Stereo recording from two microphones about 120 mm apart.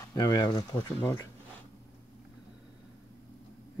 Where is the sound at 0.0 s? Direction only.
30° left (ahead or behind).